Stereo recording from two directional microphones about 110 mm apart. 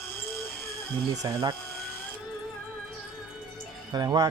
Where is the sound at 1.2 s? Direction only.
45° right (ahead or behind).